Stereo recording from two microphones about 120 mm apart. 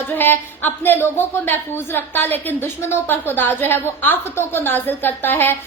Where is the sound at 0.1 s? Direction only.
15° left (ahead or behind).